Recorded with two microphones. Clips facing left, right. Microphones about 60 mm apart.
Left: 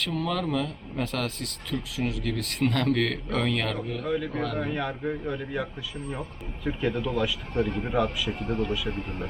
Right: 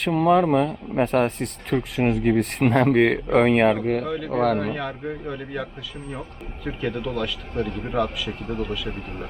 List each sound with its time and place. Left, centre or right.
0.1 s speech: right
1.7 s speech: right
2.6 s speech: right
3.8 s speech: right
4.0 s speech: centre
4.3 s speech: right
4.7 s speech: centre
6.7 s speech: centre